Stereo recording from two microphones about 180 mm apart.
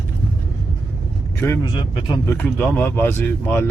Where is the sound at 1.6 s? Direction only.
25° left (ahead or behind).